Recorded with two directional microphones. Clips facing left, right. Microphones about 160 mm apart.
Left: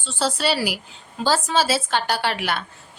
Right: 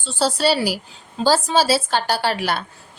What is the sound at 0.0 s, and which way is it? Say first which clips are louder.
Speech: right 4 dB; 35° right (ahead or behind).